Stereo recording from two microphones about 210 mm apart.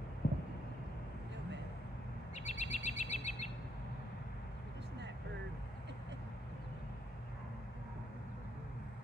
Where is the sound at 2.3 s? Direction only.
35° left (ahead or behind).